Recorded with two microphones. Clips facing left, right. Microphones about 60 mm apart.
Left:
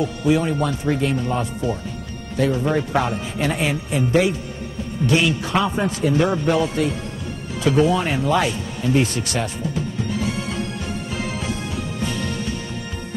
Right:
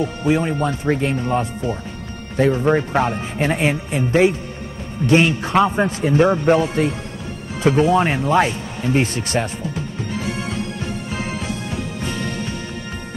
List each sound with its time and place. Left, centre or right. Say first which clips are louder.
0.0 s speech: even; right